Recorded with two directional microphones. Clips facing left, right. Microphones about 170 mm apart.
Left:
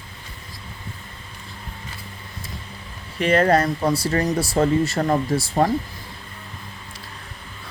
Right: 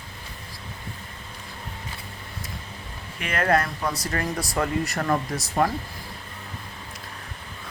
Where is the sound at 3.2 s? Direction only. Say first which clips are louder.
Left 6 dB; 30° left (ahead or behind).